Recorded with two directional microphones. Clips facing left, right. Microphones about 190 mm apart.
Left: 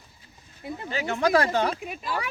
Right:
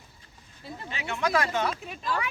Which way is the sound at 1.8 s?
10° left (ahead or behind).